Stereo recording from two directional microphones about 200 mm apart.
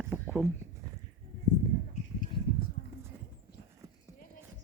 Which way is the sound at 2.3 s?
25° left (ahead or behind).